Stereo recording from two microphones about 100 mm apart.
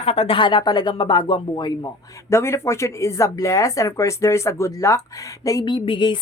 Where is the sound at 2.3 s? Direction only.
25° left (ahead or behind).